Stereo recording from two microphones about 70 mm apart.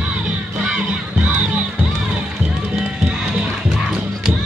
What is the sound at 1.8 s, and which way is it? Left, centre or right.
Music, centre.